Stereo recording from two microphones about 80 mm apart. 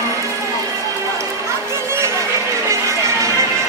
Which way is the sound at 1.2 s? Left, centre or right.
Right.